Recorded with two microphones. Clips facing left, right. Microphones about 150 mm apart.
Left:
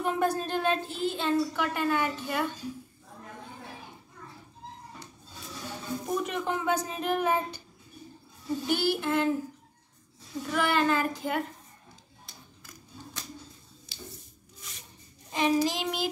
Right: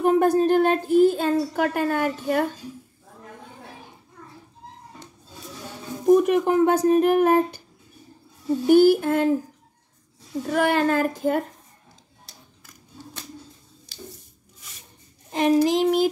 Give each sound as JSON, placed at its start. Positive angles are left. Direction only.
{"t": 0.0, "sound": "a child's voice", "side_deg": -55}
{"t": 6.0, "sound": "a child's voice", "side_deg": -55}
{"t": 8.6, "sound": "a child's voice", "side_deg": -45}
{"t": 10.4, "sound": "a child's voice", "side_deg": -45}
{"t": 15.3, "sound": "child singing", "side_deg": -55}